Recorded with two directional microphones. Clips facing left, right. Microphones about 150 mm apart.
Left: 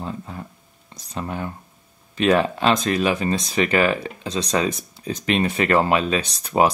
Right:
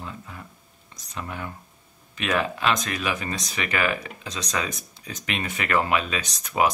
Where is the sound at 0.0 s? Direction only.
35° left (ahead or behind).